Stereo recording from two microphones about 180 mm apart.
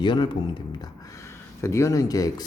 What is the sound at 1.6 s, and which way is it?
Speech, 15° left (ahead or behind).